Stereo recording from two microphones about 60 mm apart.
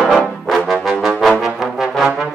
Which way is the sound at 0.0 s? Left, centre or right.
Centre.